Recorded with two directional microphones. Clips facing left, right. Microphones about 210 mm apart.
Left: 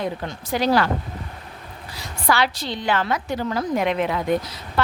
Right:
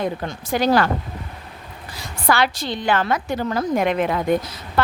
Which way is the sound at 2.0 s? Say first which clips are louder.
Right 2 dB; 50° right (ahead or behind).